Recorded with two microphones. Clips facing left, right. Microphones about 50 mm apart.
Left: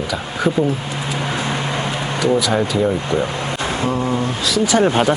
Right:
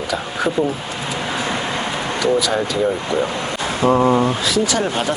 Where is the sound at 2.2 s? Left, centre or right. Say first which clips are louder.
Left 1 dB; centre.